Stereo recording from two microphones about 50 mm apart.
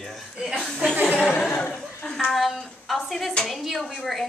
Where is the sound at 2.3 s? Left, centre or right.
Centre.